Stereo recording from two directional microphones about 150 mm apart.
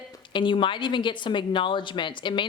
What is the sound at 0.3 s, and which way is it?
A woman's voice, 35° left (ahead or behind).